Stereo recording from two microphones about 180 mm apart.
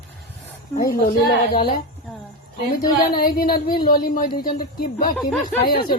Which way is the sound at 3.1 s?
55° left (ahead or behind).